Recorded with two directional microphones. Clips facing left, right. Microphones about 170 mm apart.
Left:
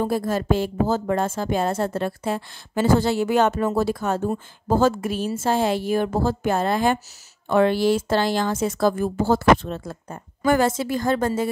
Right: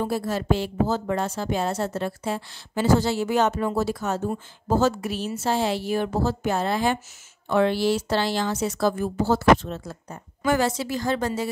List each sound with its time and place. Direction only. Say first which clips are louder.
0.0 s speech: left 3 dB; 50° left (ahead or behind)